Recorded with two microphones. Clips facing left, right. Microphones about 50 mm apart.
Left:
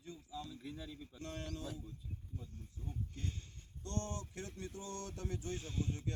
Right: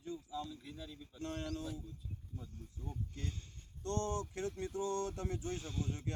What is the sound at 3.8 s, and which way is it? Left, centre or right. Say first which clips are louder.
Speech: right 5 dB; right.